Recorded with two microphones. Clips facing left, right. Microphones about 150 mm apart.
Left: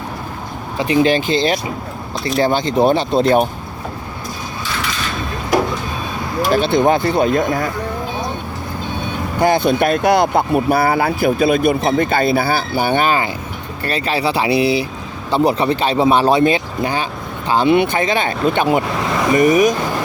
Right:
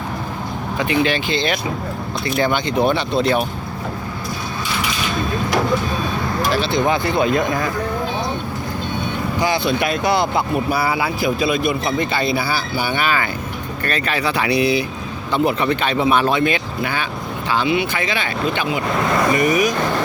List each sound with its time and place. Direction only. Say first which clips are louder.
1.0 s speech: left 5 dB; 40° left (ahead or behind)
6.5 s speech: left 6 dB; 50° left (ahead or behind)
9.4 s speech: left 6 dB; 50° left (ahead or behind)
13.1 s speech: left 3 dB; 30° left (ahead or behind)
17.7 s speech: left 6 dB; 50° left (ahead or behind)
18.9 s speech: right 1 dB; centre (ahead or behind)
19.4 s speech: left 5 dB; 45° left (ahead or behind)